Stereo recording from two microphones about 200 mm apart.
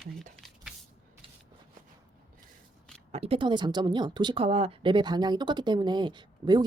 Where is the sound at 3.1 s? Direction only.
30° right (ahead or behind).